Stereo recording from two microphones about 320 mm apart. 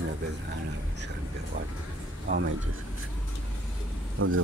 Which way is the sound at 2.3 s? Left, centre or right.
Right.